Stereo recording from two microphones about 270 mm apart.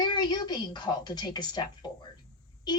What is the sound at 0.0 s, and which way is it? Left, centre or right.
A woman's voice, centre.